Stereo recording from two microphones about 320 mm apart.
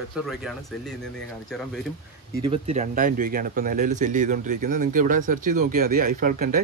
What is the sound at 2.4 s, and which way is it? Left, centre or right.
Speech, centre.